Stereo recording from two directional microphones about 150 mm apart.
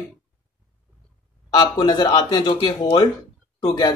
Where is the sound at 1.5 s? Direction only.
25° left (ahead or behind).